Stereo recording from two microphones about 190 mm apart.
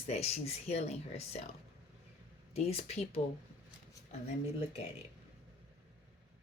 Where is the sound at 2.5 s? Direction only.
35° left (ahead or behind).